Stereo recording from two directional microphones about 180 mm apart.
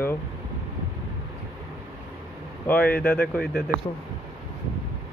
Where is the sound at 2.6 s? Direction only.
10° left (ahead or behind).